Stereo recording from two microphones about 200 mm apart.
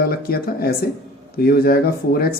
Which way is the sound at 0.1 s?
50° left (ahead or behind).